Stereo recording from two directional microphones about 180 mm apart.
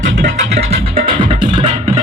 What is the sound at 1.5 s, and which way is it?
Music, 40° right (ahead or behind).